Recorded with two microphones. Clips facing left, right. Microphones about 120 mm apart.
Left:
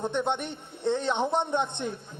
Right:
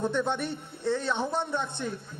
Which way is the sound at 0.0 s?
20° left (ahead or behind).